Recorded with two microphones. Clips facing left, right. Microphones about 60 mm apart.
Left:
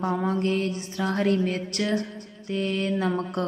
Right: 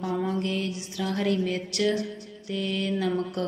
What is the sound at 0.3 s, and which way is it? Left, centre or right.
A woman's voice, left.